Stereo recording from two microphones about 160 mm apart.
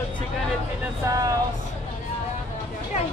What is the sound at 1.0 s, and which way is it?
Speech, 20° right (ahead or behind).